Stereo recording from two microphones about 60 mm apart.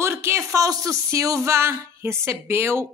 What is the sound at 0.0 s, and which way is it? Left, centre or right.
A woman's voice, right.